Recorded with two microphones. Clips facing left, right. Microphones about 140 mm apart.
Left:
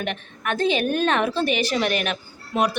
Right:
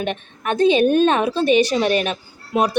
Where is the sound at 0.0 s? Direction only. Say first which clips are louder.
Right 4 dB; 20° right (ahead or behind).